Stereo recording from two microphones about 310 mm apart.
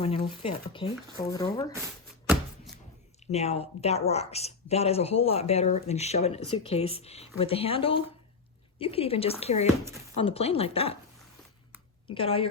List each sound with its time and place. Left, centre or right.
0.0 s speech: centre
2.2 s a sound: centre
3.3 s a woman's voice: centre
12.1 s speech: centre